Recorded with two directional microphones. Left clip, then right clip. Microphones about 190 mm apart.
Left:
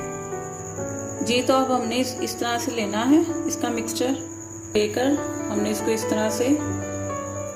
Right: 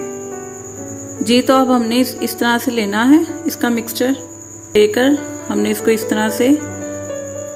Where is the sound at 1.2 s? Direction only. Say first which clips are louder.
Right 8 dB; 40° right (ahead or behind).